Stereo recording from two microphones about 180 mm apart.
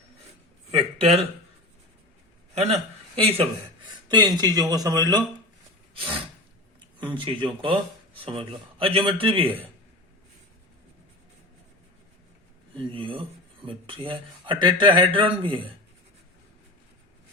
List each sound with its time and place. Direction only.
0.7 s speech: 35° right (ahead or behind)
3.2 s a man's voice: 35° right (ahead or behind)
4.1 s speech: 25° right (ahead or behind)
5.9 s snort: 30° right (ahead or behind)
7.0 s speech: 25° right (ahead or behind)
12.7 s speech: 30° right (ahead or behind)